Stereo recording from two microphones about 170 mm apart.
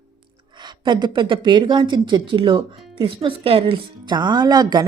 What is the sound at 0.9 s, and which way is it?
Speech, 25° right (ahead or behind).